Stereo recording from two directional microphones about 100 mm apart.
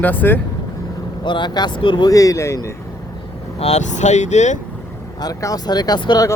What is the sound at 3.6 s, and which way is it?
Speech, 90° left.